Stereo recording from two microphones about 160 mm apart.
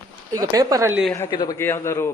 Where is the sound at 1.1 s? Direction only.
25° left (ahead or behind).